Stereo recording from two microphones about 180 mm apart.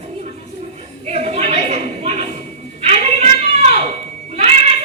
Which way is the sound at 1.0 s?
35° right (ahead or behind).